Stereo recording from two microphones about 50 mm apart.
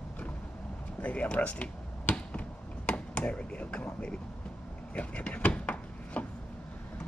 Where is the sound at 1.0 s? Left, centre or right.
Left.